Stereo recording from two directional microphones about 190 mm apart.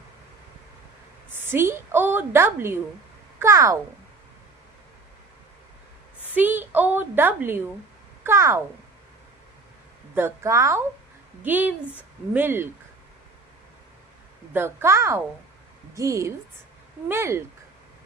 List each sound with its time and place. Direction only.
1.3 s a woman's voice: 10° right (ahead or behind)
6.3 s a woman's voice: 10° right (ahead or behind)
10.2 s a woman's voice: 15° right (ahead or behind)
14.5 s a woman's voice: 10° right (ahead or behind)